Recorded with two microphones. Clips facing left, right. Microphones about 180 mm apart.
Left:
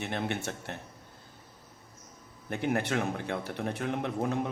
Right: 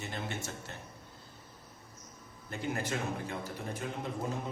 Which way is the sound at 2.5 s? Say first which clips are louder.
Left 6 dB; 65° left (ahead or behind).